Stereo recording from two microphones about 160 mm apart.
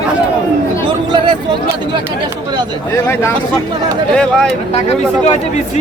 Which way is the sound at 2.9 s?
15° left (ahead or behind).